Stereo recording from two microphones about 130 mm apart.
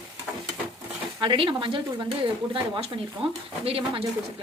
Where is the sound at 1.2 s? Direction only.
40° right (ahead or behind).